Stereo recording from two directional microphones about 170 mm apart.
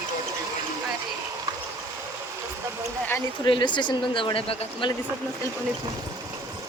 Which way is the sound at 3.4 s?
30° left (ahead or behind).